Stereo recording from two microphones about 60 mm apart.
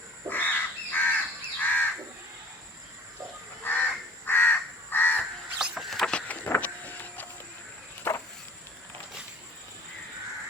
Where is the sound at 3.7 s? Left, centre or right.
Left.